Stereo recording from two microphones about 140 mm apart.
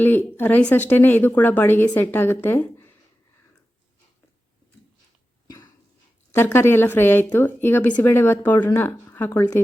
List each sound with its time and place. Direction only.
0.0 s a woman's voice: 15° left (ahead or behind)
6.3 s a woman's voice: 15° left (ahead or behind)